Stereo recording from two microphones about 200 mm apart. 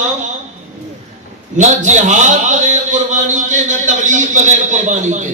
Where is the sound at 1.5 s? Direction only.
35° right (ahead or behind).